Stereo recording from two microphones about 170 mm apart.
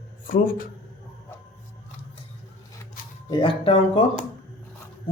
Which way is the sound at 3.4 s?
35° left (ahead or behind).